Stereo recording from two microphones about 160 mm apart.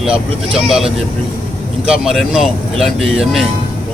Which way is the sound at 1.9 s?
5° right (ahead or behind).